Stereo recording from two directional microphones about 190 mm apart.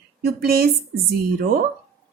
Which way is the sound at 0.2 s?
55° right (ahead or behind).